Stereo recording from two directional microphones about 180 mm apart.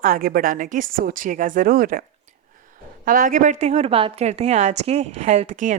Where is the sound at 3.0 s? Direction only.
50° right (ahead or behind).